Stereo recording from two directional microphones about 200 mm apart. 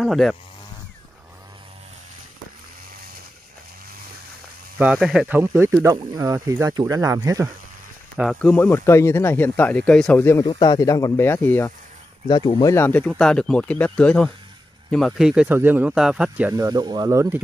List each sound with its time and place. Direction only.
0.0 s speech: centre (ahead or behind)
4.7 s speech: 5° right (ahead or behind)
8.2 s speech: centre (ahead or behind)
10.4 s speech: 20° left (ahead or behind); by 17.4 s 15° right (ahead or behind)